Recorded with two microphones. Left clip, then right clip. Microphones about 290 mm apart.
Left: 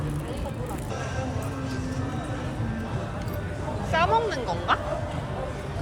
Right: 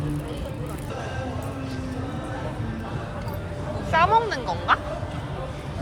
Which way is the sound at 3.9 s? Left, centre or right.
Centre.